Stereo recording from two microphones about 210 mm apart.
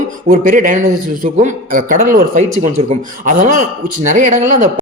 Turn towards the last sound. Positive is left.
turn(degrees=-35)  # may be behind; listen again after turning